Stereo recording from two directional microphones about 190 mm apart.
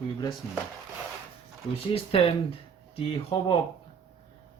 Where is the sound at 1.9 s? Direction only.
30° left (ahead or behind).